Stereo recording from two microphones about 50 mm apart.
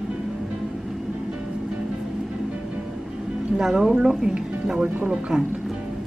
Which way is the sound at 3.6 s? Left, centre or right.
Centre.